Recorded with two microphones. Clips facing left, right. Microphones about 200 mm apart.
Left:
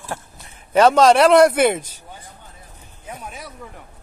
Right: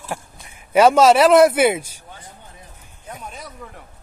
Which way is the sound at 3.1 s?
5° left (ahead or behind).